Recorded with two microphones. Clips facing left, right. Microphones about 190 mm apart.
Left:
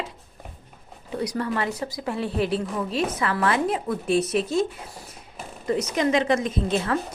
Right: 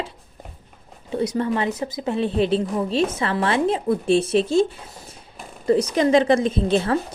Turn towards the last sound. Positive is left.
turn(degrees=-30)  # may be behind; listen again after turning